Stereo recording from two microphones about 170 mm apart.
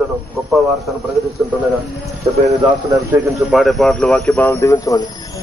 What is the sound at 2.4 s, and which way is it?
Speech, 15° right (ahead or behind).